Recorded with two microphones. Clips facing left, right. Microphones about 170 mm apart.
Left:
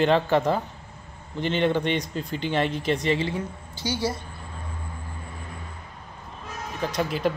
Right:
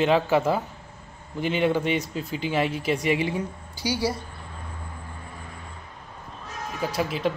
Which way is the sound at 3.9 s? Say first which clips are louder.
Right 1 dB; 35° right (ahead or behind).